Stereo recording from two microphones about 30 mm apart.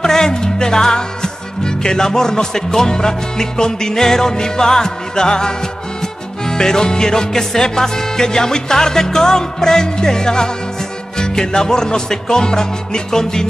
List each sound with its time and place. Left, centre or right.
0.0 s music: left